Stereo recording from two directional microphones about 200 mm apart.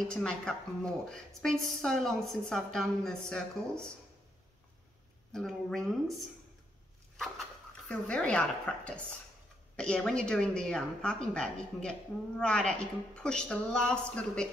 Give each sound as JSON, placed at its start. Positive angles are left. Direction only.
{"t": 0.1, "sound": "a woman's voice", "side_deg": 5}
{"t": 5.3, "sound": "a woman's voice", "side_deg": 0}
{"t": 7.9, "sound": "a woman's voice", "side_deg": 5}